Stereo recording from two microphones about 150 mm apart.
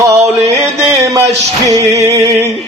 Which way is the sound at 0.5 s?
20° right (ahead or behind).